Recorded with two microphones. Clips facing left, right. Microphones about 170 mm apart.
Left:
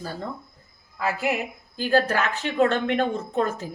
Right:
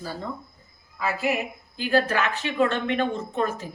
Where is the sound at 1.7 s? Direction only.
40° left (ahead or behind).